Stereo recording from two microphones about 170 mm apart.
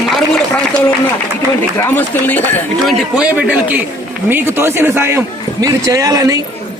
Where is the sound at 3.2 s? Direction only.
5° right (ahead or behind).